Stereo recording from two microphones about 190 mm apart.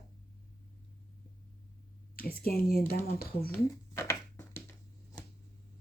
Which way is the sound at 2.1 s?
50° left (ahead or behind).